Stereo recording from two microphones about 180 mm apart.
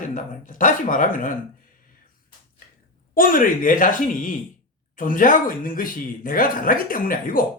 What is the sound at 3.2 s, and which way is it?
Speech, 50° left (ahead or behind).